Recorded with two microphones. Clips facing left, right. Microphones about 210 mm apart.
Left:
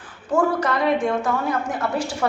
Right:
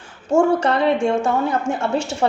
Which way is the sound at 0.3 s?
25° right (ahead or behind).